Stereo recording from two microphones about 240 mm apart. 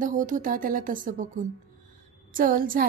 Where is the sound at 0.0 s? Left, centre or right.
Right.